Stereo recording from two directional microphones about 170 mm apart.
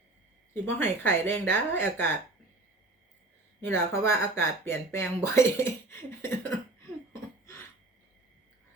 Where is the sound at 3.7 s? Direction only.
15° left (ahead or behind).